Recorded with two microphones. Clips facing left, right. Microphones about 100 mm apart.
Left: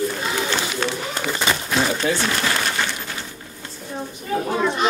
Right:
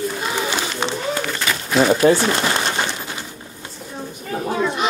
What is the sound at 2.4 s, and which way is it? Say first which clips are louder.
Pigeon: right 2 dB; 20° right (ahead or behind).